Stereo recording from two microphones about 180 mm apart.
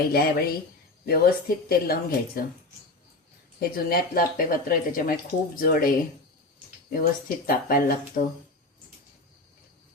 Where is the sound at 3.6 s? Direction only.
55° left (ahead or behind).